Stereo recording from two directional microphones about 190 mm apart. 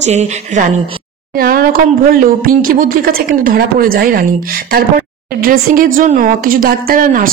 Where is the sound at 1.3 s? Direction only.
50° right (ahead or behind).